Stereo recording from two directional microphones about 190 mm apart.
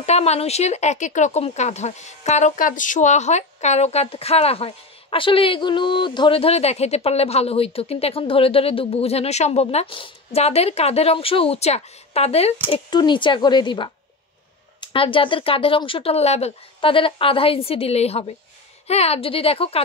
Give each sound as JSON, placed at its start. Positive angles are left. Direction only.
{"t": 0.0, "sound": "speech", "side_deg": 35}